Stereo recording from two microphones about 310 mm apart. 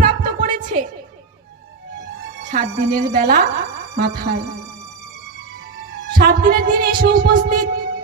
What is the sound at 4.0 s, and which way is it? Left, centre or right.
Speech, right.